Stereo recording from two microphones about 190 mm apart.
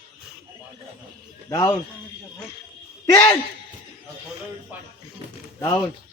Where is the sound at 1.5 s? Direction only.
15° left (ahead or behind).